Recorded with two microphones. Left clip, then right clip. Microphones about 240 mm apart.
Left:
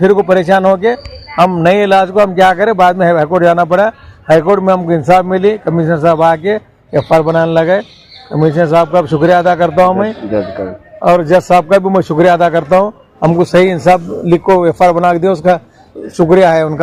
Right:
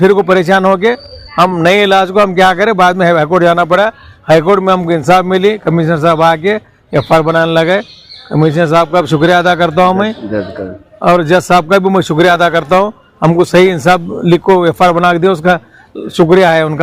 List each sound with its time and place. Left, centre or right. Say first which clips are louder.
0.0 s a man's voice: right 1 dB; right
16.0 s a man's voice: even; right